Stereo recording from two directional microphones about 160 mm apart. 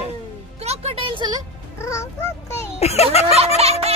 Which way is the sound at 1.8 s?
20° left (ahead or behind).